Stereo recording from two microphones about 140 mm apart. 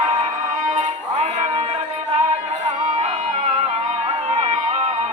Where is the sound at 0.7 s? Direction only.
55° right (ahead or behind).